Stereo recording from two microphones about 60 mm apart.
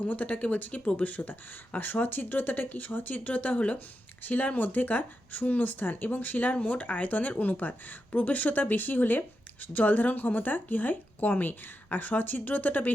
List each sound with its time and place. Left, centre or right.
0.1 s speech: left